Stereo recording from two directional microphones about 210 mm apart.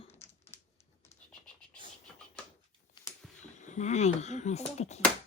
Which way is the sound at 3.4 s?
35° left (ahead or behind).